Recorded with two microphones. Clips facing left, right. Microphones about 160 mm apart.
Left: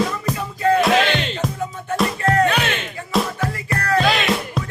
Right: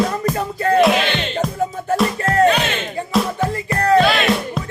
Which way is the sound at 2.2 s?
35° right (ahead or behind).